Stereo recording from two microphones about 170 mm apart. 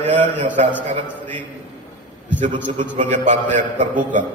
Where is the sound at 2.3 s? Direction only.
50° right (ahead or behind).